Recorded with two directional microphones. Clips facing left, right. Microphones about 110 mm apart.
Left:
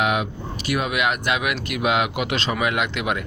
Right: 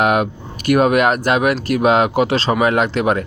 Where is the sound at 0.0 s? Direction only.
45° right (ahead or behind).